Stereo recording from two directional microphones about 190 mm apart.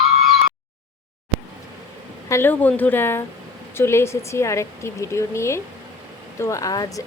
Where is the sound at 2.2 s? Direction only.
15° left (ahead or behind).